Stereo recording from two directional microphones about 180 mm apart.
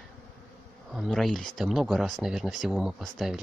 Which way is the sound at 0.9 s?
Centre (ahead or behind).